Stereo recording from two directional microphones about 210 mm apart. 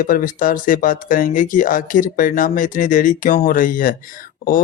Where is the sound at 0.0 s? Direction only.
40° left (ahead or behind).